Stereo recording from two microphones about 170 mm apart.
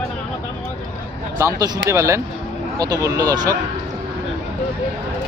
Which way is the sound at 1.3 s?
15° right (ahead or behind).